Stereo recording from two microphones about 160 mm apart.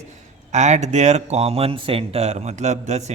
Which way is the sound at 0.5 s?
45° right (ahead or behind).